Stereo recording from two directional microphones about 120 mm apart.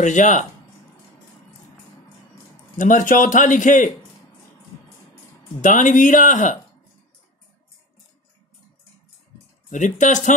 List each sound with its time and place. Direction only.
0.0 s a man's voice: 90° left
2.8 s a man's voice: 90° left
5.6 s a man's voice: 90° left
9.7 s a man's voice: 90° left